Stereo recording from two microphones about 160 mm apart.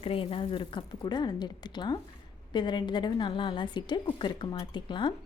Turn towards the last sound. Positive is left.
turn(degrees=30)  # may be behind; listen again after turning